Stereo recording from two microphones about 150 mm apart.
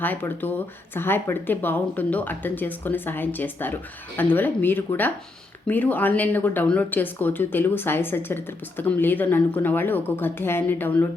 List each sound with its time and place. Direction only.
0.0 s speech: 15° left (ahead or behind)